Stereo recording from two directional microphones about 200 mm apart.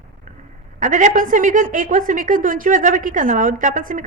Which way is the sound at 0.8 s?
40° right (ahead or behind).